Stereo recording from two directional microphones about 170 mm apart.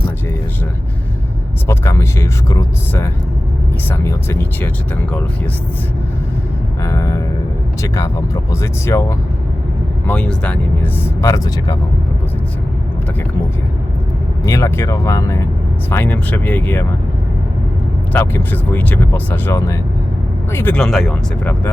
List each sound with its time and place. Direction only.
1.6 s speech: 15° left (ahead or behind)
6.8 s music: 20° left (ahead or behind)
7.8 s speech: 15° left (ahead or behind)
10.1 s speech: 5° left (ahead or behind)
11.2 s speech: 20° left (ahead or behind)
14.4 s speech: 20° left (ahead or behind)
18.1 s speech: 15° left (ahead or behind)